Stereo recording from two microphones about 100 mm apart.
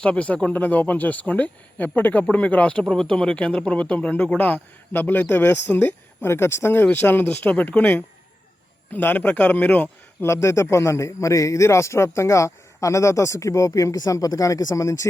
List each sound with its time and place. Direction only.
0.0 s a man's voice: 15° left (ahead or behind); by 15.0 s 35° left (ahead or behind)